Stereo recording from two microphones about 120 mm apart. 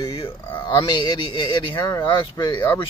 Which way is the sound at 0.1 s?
50° left (ahead or behind).